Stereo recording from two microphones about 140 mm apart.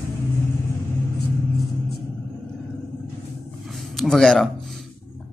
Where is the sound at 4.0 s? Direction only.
5° left (ahead or behind).